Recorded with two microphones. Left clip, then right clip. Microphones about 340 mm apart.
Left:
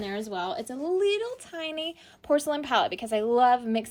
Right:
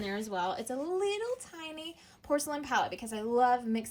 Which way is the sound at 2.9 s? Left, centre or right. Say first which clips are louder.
Left 9 dB; centre.